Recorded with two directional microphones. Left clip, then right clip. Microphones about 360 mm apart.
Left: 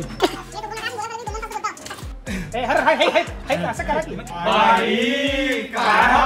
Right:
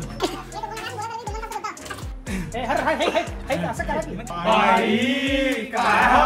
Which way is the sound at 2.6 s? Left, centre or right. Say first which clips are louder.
Left 5 dB; left.